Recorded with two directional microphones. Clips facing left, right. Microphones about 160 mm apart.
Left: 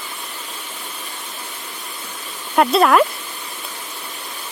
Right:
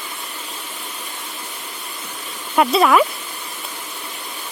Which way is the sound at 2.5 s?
Centre (ahead or behind).